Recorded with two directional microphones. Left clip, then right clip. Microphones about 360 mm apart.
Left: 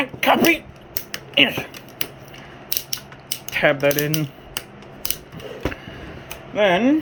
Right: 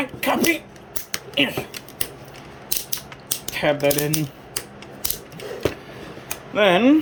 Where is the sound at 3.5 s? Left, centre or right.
Centre.